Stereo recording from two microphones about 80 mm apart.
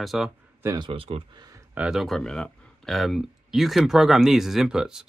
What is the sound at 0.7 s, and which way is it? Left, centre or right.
Speech, right.